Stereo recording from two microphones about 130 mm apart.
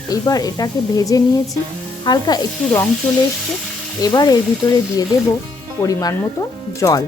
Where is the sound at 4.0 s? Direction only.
30° left (ahead or behind).